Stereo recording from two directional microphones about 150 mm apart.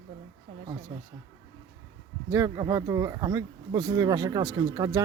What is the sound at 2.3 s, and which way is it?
Speech, 25° right (ahead or behind).